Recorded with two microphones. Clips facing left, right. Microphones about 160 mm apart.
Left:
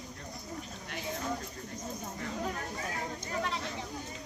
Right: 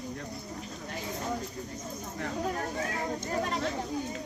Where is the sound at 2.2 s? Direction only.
60° right (ahead or behind).